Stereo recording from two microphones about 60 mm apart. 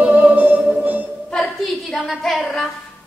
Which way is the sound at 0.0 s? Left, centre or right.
Right.